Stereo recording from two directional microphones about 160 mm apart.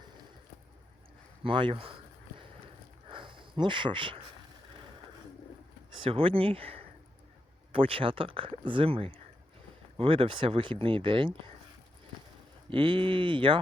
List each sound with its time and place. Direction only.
1.5 s speech: 30° right (ahead or behind)
3.1 s a sound: 30° right (ahead or behind)
5.9 s speech: 35° right (ahead or behind)
12.7 s speech: 35° right (ahead or behind)